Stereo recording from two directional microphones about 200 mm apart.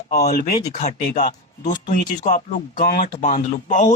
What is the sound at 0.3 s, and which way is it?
Speech, 35° left (ahead or behind).